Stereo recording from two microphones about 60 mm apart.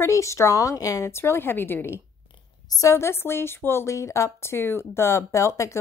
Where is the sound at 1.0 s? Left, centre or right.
Left.